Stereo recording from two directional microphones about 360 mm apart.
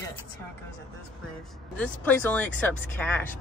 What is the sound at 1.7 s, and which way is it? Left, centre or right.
Speech, centre.